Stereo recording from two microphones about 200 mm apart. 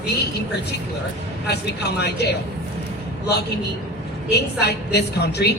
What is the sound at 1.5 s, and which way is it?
Speech, 55° left (ahead or behind).